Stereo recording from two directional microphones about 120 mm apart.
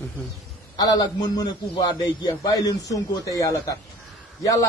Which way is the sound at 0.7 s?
35° left (ahead or behind).